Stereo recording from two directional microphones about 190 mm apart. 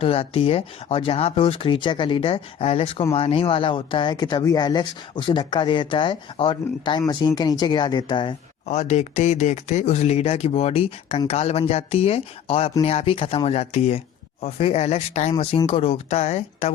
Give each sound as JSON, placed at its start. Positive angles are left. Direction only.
{"t": 0.0, "sound": "speech", "side_deg": 30}